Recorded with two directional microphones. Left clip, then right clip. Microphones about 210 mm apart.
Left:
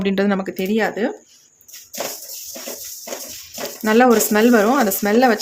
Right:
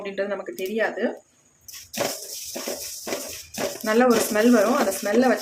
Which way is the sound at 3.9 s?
45° left (ahead or behind).